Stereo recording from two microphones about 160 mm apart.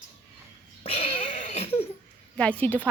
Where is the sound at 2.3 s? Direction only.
10° left (ahead or behind).